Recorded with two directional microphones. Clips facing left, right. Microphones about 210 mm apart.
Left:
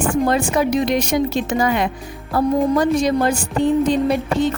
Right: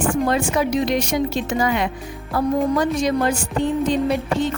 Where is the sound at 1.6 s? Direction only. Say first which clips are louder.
Left 1 dB; 45° left (ahead or behind).